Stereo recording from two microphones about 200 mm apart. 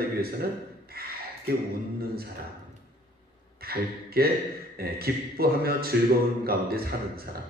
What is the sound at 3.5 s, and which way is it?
A man's voice, 50° right (ahead or behind).